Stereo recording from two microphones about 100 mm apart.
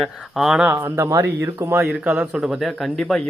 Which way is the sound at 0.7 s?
30° right (ahead or behind).